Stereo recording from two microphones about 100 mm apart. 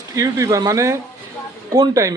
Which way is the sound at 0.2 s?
35° right (ahead or behind).